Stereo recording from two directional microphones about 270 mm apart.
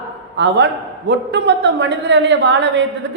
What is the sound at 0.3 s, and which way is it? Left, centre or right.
A man's voice, right.